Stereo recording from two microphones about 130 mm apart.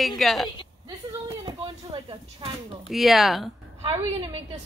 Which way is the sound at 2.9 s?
Centre (ahead or behind).